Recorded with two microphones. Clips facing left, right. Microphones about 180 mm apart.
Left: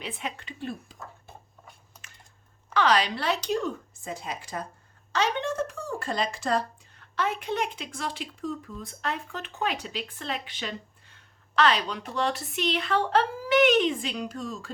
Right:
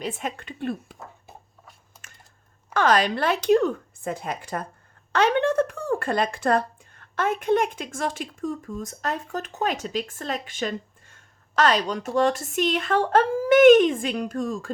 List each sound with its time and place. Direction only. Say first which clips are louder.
0.0 s speech: right 5 dB; 45° right (ahead or behind)
2.7 s speech: right 3 dB; 45° right (ahead or behind)